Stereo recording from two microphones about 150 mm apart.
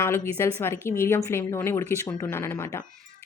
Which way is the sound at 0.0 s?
20° left (ahead or behind).